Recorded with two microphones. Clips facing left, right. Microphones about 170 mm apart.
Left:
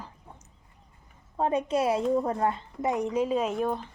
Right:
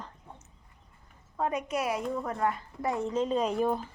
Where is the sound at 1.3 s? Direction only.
30° left (ahead or behind); by 3.9 s 5° right (ahead or behind).